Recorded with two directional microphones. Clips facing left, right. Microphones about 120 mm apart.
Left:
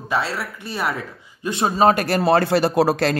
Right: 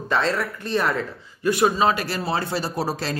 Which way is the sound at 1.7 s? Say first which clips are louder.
Left 5 dB; 50° left (ahead or behind).